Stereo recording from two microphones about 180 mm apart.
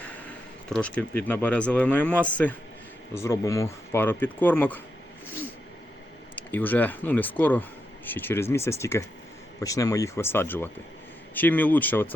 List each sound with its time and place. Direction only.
0.0 s speech: 5° left (ahead or behind)
6.3 s speech: 10° left (ahead or behind)